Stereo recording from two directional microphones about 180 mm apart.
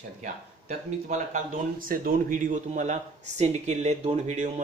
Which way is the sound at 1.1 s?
45° right (ahead or behind).